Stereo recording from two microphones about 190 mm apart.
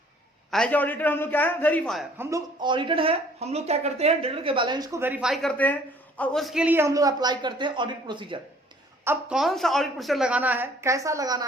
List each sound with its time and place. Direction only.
0.5 s a man's voice: 5° left (ahead or behind)
2.1 s speech: 15° right (ahead or behind)
9.0 s a woman's voice: centre (ahead or behind); by 11.4 s 20° right (ahead or behind)